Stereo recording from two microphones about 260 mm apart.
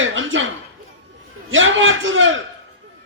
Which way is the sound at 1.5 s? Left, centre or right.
Right.